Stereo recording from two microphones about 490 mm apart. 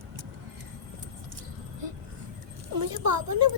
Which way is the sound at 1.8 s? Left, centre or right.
Right.